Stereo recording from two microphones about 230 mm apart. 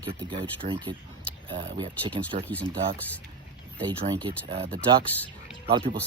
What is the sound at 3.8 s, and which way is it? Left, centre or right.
Speech, centre.